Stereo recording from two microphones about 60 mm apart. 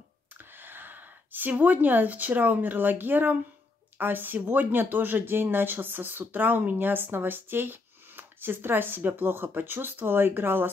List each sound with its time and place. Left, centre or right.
0.4 s speech: right